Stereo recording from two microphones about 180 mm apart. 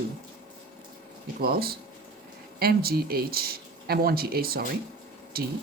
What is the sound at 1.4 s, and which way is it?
Speech, 60° right (ahead or behind).